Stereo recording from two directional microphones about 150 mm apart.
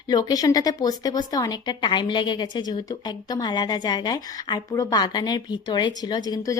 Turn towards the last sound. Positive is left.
turn(degrees=25)  # may be behind; listen again after turning